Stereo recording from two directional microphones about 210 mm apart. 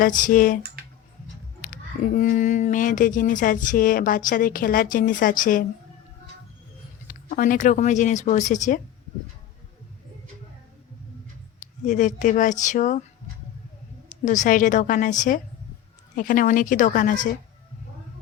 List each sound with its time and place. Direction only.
0.0 s speech: 40° left (ahead or behind)
1.7 s speech: 40° left (ahead or behind)
7.1 s speech: 40° left (ahead or behind)
11.9 s speech: 35° left (ahead or behind)
14.1 s speech: 35° left (ahead or behind)